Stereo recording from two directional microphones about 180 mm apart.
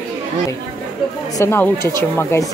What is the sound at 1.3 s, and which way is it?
Speech, 15° left (ahead or behind).